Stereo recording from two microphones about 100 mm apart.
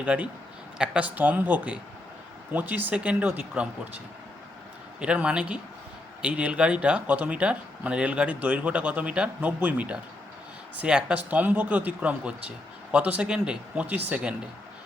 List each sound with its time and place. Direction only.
0.0 s speech: 10° right (ahead or behind)
4.9 s speech: 10° right (ahead or behind)